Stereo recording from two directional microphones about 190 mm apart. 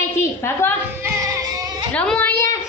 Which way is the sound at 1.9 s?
5° left (ahead or behind).